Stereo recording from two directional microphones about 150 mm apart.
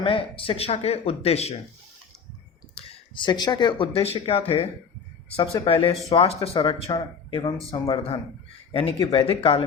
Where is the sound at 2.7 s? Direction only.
30° left (ahead or behind).